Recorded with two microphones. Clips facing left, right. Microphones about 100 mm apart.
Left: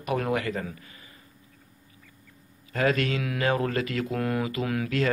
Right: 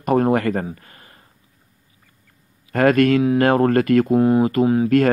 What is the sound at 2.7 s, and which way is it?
Speech, 55° right (ahead or behind).